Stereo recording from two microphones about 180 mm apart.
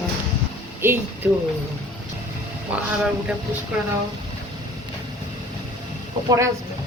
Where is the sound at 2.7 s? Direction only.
5° right (ahead or behind).